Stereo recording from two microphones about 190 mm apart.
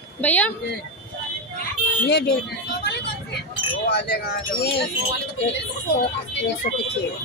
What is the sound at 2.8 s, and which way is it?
Vehicle, 60° left (ahead or behind).